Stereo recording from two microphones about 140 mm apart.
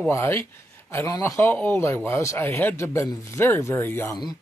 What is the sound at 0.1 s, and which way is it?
Speech, 20° left (ahead or behind).